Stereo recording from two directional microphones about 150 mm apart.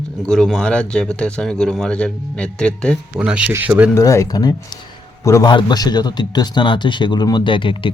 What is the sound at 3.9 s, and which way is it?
A man's voice, 20° left (ahead or behind).